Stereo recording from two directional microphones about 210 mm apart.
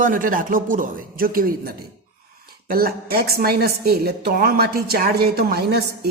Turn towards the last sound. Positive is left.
turn(degrees=-50)  # may be behind; listen again after turning